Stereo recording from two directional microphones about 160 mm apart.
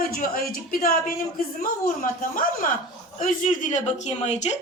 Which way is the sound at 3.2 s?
55° left (ahead or behind).